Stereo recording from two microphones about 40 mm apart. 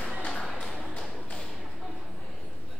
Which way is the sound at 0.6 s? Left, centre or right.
Centre.